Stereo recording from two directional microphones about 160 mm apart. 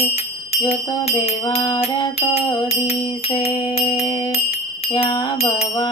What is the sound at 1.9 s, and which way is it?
Music, 30° left (ahead or behind).